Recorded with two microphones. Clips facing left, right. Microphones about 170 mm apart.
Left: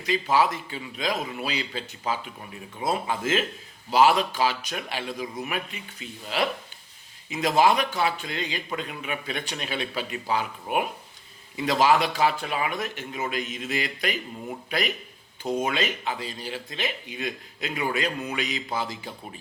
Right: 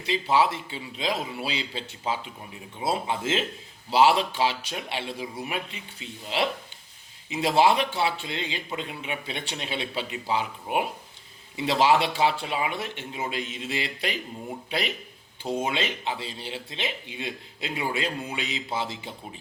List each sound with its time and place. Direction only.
0.0 s speech: 25° right (ahead or behind)